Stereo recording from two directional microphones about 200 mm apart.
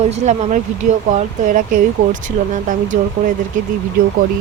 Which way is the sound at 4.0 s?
45° right (ahead or behind).